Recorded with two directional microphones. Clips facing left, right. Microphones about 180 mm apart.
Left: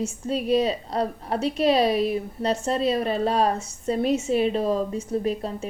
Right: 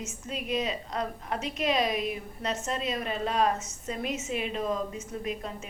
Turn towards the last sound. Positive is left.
turn(degrees=35)  # may be behind; listen again after turning